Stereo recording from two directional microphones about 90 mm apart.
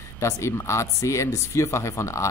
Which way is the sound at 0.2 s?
30° left (ahead or behind).